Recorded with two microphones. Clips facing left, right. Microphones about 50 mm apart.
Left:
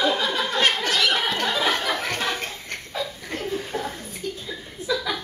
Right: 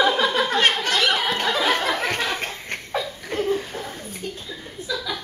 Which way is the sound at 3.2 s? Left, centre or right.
Right.